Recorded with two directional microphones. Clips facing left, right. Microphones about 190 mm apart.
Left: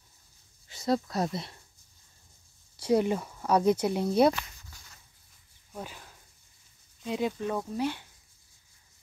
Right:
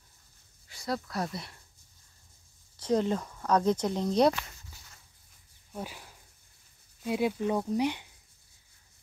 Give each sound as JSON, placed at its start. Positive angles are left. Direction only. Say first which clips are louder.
{"t": 0.7, "sound": "speech", "louder": "left 6 dB", "side_deg": 25}
{"t": 2.8, "sound": "speech", "louder": "left 2 dB", "side_deg": 10}
{"t": 5.7, "sound": "a sound", "louder": "right 1 dB", "side_deg": -5}
{"t": 7.0, "sound": "speech", "louder": "right 2 dB", "side_deg": -5}